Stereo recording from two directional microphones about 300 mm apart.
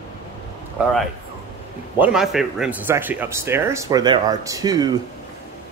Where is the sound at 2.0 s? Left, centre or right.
Centre.